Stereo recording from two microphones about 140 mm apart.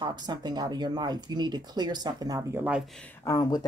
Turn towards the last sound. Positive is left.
turn(degrees=25)  # may be behind; listen again after turning